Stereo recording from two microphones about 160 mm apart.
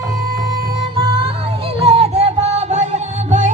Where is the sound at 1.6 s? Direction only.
40° right (ahead or behind).